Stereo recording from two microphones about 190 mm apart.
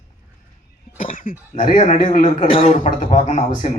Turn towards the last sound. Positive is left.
turn(degrees=35)  # may be behind; listen again after turning